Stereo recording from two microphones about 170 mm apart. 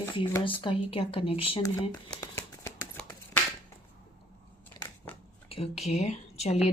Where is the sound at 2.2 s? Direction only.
20° left (ahead or behind).